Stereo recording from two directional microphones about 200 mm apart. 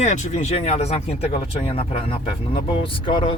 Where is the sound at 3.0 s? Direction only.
25° left (ahead or behind).